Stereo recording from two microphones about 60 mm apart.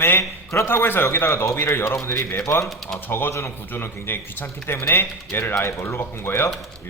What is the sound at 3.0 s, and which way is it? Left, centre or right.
A man's voice, left.